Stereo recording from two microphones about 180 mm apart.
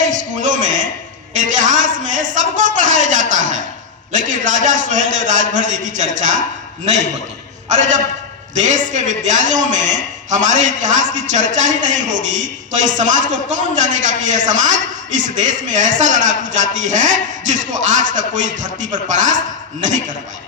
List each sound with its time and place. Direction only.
0.4 s a sound: 45° right (ahead or behind)
1.4 s a man's voice: 45° right (ahead or behind)
7.7 s a man's voice: 45° right (ahead or behind)